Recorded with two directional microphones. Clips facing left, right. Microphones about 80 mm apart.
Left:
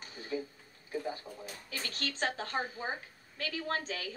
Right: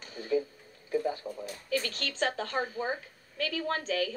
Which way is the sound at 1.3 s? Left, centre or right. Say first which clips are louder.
Right 8 dB; right.